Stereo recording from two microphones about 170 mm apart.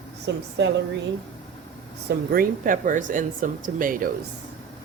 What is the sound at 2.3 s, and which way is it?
Speech, 55° right (ahead or behind).